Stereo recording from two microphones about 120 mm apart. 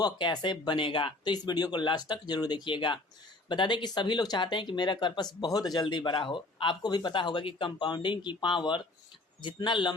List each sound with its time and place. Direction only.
0.0 s speech: 40° left (ahead or behind)